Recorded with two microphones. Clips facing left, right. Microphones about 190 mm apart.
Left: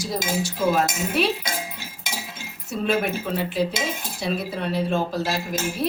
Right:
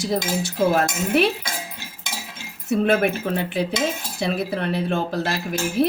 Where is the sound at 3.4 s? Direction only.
55° right (ahead or behind).